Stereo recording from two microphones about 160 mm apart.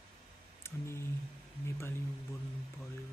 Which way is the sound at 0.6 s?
15° left (ahead or behind).